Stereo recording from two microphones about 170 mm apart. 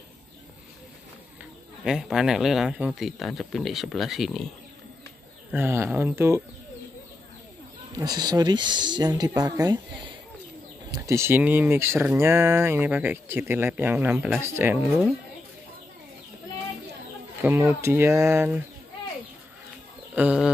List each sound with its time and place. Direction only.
1.9 s speech: 5° right (ahead or behind)
5.5 s speech: 15° right (ahead or behind)
8.0 s speech: 25° right (ahead or behind)
10.9 s speech: 15° right (ahead or behind)
17.4 s speech: 15° right (ahead or behind)
20.2 s speech: 5° right (ahead or behind)